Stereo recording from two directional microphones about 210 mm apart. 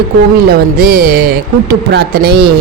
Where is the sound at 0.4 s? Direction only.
45° right (ahead or behind).